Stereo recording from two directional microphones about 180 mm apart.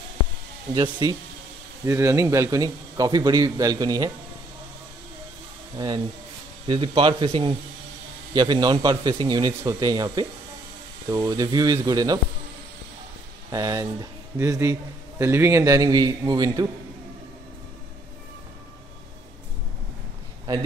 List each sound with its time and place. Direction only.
0.7 s a man's voice: 25° right (ahead or behind)
6.7 s a man's voice: 25° right (ahead or behind)
13.5 s a man's voice: 20° right (ahead or behind)